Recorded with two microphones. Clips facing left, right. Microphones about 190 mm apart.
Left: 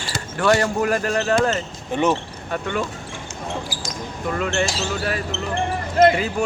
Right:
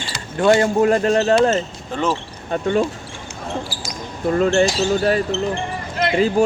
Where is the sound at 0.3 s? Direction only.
20° right (ahead or behind).